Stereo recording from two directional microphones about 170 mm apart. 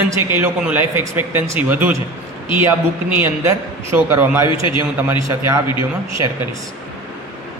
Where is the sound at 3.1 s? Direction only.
15° right (ahead or behind).